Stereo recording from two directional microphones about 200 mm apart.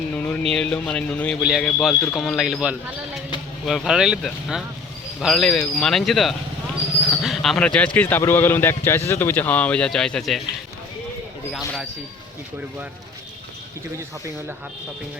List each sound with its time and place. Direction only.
0.1 s a sound: 5° left (ahead or behind)
0.5 s speech: 5° left (ahead or behind)
11.5 s speech: centre (ahead or behind)